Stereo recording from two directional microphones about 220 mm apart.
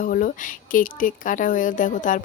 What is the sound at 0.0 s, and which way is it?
Speech, 40° left (ahead or behind).